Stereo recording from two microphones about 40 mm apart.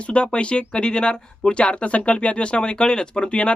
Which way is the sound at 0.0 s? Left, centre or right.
Left.